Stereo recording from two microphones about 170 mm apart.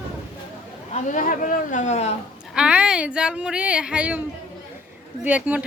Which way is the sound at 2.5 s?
5° right (ahead or behind).